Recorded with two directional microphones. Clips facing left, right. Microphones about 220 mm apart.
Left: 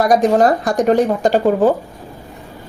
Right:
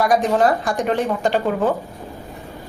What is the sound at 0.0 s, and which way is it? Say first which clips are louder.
Speech: left 4 dB; 40° left (ahead or behind).